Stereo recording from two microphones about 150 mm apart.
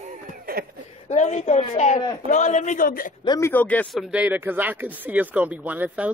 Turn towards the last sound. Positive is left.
turn(degrees=-10)  # may be behind; listen again after turning